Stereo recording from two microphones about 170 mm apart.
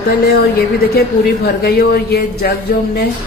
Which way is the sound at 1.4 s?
65° left (ahead or behind).